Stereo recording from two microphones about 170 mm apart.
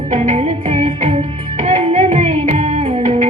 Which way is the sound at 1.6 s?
45° right (ahead or behind).